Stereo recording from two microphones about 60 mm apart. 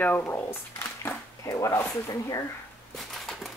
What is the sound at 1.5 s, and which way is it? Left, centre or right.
Speech, left.